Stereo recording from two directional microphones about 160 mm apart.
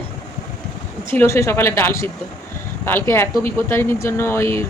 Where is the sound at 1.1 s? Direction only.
15° left (ahead or behind).